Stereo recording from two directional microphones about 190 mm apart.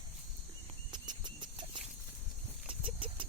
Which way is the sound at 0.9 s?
25° right (ahead or behind).